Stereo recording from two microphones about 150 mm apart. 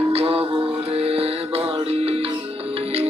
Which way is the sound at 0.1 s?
40° right (ahead or behind).